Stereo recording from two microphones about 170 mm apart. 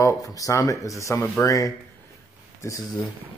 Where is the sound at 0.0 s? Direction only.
20° left (ahead or behind).